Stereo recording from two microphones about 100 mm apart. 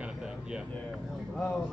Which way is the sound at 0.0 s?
10° right (ahead or behind).